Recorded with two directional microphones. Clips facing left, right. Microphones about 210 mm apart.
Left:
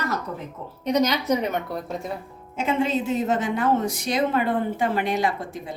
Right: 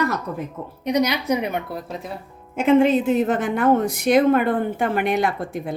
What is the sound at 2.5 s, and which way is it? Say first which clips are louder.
A woman's voice: right 8 dB; 55° right (ahead or behind).